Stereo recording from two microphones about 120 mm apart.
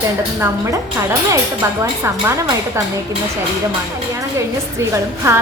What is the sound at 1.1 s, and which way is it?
A woman's voice, 20° right (ahead or behind).